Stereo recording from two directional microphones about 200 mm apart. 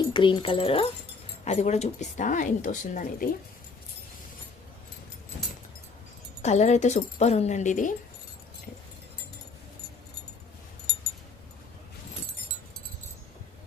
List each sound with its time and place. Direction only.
0.1 s a woman's voice: 25° left (ahead or behind); by 3.2 s 40° left (ahead or behind)
6.4 s a woman's voice: 35° left (ahead or behind)